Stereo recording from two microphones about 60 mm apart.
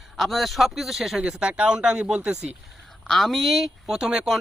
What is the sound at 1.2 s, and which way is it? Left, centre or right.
Speech, centre.